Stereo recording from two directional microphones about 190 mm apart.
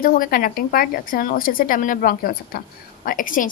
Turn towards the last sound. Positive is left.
turn(degrees=45)  # may be behind; listen again after turning